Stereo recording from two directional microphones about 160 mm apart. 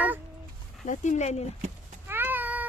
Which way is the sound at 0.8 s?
50° left (ahead or behind).